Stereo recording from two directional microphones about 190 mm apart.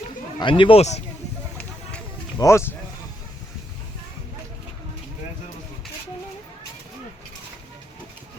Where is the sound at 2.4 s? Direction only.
15° left (ahead or behind).